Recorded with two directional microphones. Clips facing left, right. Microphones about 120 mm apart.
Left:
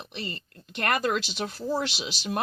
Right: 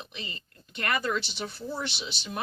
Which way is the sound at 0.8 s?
65° left (ahead or behind).